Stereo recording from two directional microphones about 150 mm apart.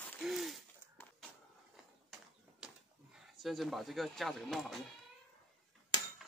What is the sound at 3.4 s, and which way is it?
Speech, centre (ahead or behind).